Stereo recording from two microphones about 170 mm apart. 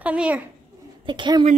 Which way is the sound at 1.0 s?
25° right (ahead or behind).